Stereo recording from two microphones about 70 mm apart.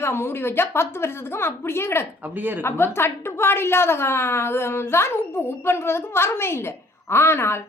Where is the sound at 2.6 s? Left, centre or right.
Left.